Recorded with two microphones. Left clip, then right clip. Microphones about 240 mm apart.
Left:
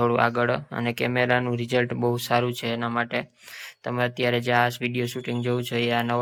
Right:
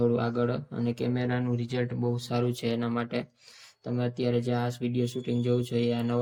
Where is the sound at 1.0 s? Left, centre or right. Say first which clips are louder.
Left 10 dB; left.